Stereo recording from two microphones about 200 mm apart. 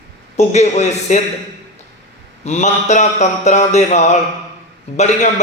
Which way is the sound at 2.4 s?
35° left (ahead or behind).